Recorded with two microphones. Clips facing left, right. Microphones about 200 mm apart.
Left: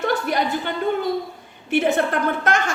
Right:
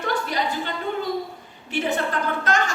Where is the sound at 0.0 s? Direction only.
55° left (ahead or behind).